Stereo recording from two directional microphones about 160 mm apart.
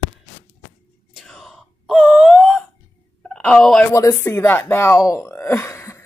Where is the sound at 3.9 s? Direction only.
15° left (ahead or behind).